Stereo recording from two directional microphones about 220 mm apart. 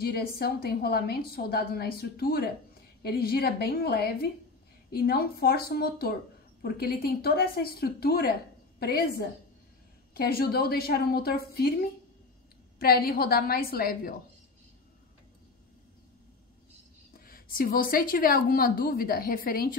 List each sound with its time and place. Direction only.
0.0 s speech: 45° left (ahead or behind)
17.2 s a woman's voice: 40° left (ahead or behind)